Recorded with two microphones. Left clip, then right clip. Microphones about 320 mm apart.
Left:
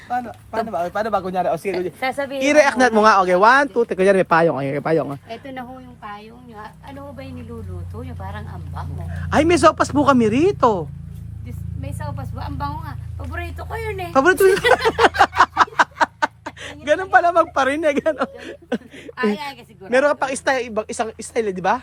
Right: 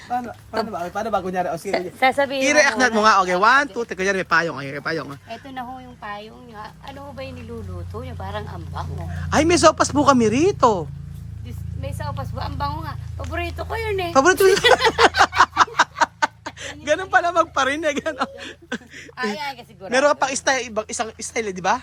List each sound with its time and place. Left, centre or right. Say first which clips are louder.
0.1 s speech: left 1 dB; centre
1.7 s speech: right 4 dB; right
2.4 s speech: left 4 dB; centre
5.5 s speech: right 2 dB; centre
8.2 s speech: right 6 dB; centre
9.1 s speech: left 1 dB; centre
11.8 s speech: right 2 dB; centre
14.1 s speech: left 1 dB; centre
15.4 s a sound: left 1 dB; centre
19.9 s speech: left 1 dB; centre